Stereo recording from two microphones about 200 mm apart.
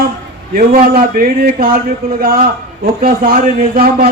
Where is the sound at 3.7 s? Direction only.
50° right (ahead or behind).